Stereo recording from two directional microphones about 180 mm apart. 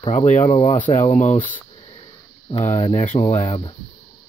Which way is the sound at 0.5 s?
30° left (ahead or behind).